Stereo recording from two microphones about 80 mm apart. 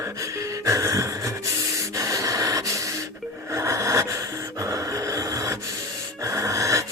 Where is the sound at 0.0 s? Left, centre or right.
Right.